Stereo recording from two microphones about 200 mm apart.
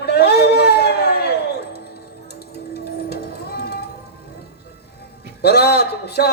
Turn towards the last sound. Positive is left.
turn(degrees=55)  # may be behind; listen again after turning